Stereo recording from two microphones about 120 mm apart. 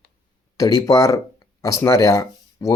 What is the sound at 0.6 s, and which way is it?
Speech, 30° left (ahead or behind).